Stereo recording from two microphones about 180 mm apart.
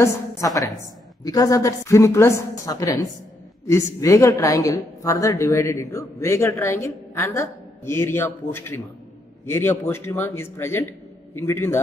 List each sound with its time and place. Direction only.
0.0 s a woman's voice: 15° left (ahead or behind)